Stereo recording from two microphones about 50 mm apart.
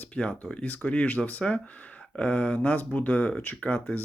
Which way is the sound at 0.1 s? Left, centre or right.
Left.